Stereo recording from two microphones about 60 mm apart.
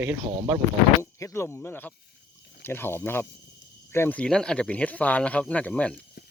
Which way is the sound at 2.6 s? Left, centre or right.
Left.